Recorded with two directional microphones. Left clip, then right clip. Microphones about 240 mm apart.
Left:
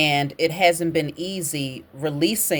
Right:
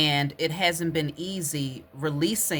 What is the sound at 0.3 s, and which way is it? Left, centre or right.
Speech, right.